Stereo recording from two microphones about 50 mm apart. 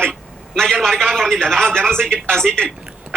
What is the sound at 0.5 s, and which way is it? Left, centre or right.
Speech, centre.